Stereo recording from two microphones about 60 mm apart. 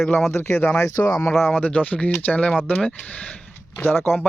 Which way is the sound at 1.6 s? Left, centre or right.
Left.